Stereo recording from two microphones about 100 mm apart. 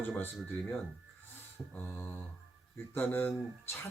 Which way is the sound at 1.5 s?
20° left (ahead or behind).